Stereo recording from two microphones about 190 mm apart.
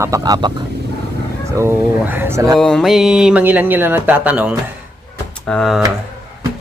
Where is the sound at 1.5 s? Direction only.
10° right (ahead or behind).